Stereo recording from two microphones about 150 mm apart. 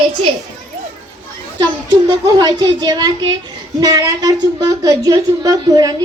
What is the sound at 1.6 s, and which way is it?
A woman's voice, 25° right (ahead or behind).